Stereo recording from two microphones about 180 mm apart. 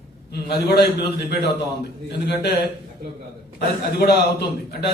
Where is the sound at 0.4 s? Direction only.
65° left (ahead or behind).